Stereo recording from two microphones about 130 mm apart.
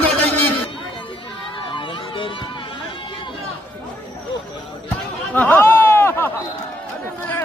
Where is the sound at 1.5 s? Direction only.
40° left (ahead or behind).